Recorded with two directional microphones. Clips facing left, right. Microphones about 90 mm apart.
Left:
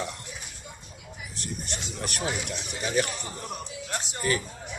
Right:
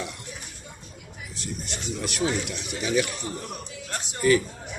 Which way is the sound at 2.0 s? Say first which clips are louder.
Right 5 dB; 45° left (ahead or behind).